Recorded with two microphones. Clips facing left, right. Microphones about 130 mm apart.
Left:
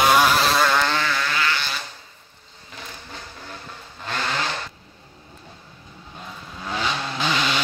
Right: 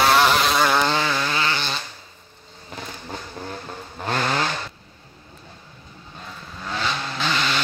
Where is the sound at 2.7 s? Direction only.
45° right (ahead or behind).